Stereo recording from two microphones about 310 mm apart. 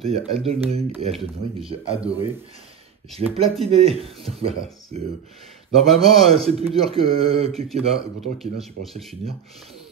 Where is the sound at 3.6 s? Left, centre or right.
Centre.